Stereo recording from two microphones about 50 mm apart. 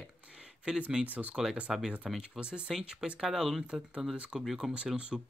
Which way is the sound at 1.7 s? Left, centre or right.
Centre.